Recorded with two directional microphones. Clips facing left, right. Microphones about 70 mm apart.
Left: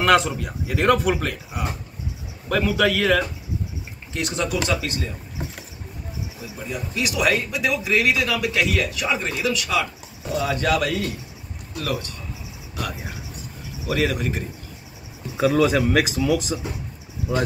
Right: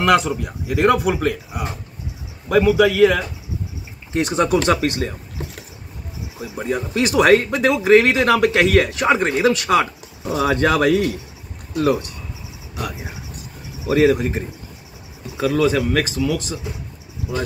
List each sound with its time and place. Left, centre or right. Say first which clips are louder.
0.0 s a man's voice: right 2 dB; centre
4.1 s speech: right 7 dB; right
4.6 s speech: right 7 dB; right
6.4 s speech: right 9 dB; right
11.7 s speech: right 9 dB; right
12.9 s a man's voice: right 1 dB; centre
15.3 s speech: right 1 dB; centre